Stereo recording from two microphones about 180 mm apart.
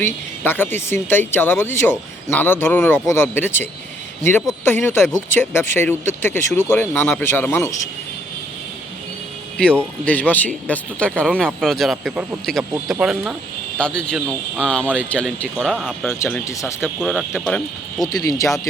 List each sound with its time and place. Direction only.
0.0 s speech: 10° left (ahead or behind)
10.1 s speech: 10° left (ahead or behind)
16.0 s speech: 15° left (ahead or behind)
17.0 s speech: centre (ahead or behind)
18.0 s speech: 20° left (ahead or behind)